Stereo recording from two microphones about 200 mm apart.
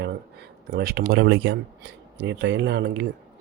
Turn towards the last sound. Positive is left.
turn(degrees=-60)  # may be behind; listen again after turning